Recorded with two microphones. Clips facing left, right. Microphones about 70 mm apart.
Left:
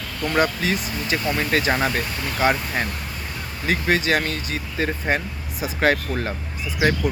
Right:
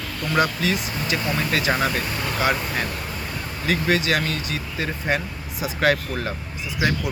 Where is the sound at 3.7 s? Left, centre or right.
Left.